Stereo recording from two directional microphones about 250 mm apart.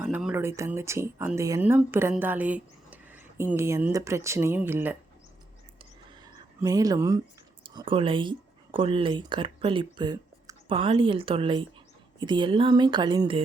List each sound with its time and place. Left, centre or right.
0.0 s speech: centre
6.6 s speech: centre